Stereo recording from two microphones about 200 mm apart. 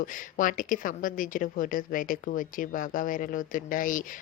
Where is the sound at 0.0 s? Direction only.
40° left (ahead or behind).